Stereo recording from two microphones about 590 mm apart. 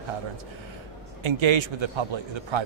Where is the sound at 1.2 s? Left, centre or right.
Right.